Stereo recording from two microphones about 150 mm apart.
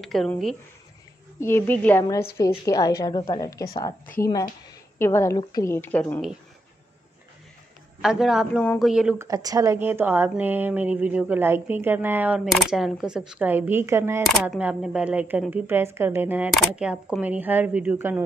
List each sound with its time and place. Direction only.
0.0 s a man's voice: centre (ahead or behind)
1.4 s a woman's voice: 15° left (ahead or behind)
2.3 s a woman's voice: 25° left (ahead or behind)
8.0 s a man's voice: 5° right (ahead or behind)
9.2 s speech: 25° right (ahead or behind)
14.2 s speech: 5° right (ahead or behind)
16.4 s speech: 5° right (ahead or behind)